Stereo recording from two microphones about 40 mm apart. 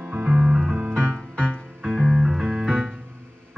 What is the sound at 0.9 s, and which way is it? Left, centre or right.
Music, left.